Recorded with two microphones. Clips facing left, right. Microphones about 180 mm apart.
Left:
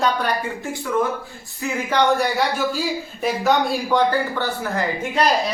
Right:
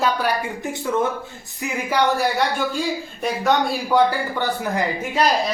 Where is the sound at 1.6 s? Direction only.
10° right (ahead or behind).